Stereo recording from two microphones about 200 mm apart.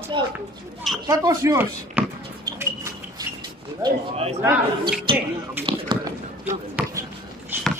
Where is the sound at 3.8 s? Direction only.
30° right (ahead or behind).